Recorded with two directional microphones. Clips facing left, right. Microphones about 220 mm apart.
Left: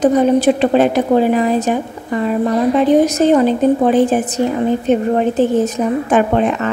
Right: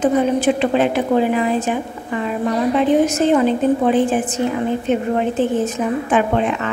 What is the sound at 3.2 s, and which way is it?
A woman's voice, 40° left (ahead or behind).